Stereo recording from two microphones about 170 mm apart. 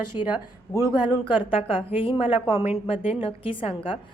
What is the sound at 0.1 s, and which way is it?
Speech, 15° right (ahead or behind).